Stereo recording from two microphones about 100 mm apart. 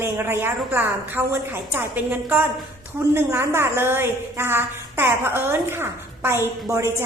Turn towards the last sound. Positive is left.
turn(degrees=-30)  # may be behind; listen again after turning